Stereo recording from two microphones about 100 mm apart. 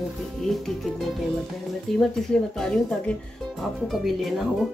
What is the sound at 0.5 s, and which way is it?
Speech, centre (ahead or behind).